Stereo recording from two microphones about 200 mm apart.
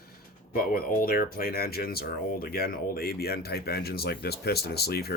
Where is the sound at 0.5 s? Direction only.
45° left (ahead or behind).